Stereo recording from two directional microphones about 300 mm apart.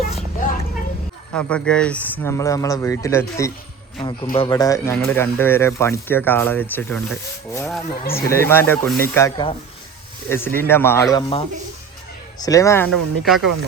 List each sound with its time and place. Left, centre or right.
1.3 s speech: centre